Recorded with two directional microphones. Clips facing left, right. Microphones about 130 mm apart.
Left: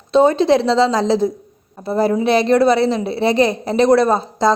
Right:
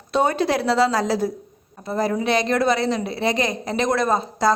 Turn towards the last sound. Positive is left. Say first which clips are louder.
# left 4 dB
turn(degrees=30)  # may be behind; listen again after turning